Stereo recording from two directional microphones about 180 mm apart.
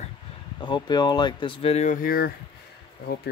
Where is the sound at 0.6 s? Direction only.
25° left (ahead or behind).